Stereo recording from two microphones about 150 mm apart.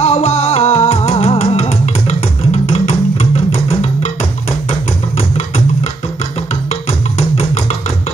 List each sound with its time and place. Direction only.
0.0 s music: 45° left (ahead or behind)
6.9 s music: 45° left (ahead or behind)